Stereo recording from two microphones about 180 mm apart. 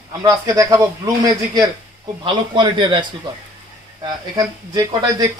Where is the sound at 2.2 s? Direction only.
25° right (ahead or behind).